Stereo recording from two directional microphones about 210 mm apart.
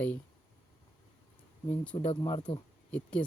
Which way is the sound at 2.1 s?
20° left (ahead or behind).